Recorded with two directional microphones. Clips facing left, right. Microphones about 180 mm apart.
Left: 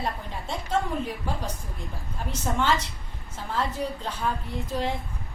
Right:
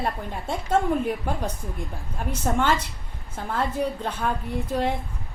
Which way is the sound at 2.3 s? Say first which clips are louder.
Right 2 dB; 50° right (ahead or behind).